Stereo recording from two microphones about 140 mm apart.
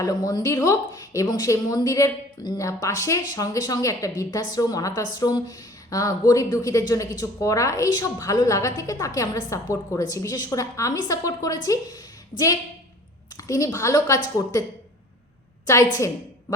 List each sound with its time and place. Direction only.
0.0 s a woman's voice: 25° left (ahead or behind)
13.3 s a woman's voice: 25° left (ahead or behind)
15.6 s a woman's voice: 20° left (ahead or behind)